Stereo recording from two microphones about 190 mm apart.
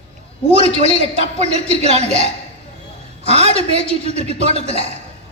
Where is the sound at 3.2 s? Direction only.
35° right (ahead or behind).